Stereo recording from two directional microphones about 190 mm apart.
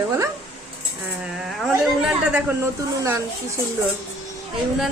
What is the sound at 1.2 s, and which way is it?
A man's voice, centre (ahead or behind).